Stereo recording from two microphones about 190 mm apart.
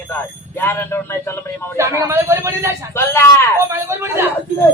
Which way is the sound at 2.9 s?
15° left (ahead or behind).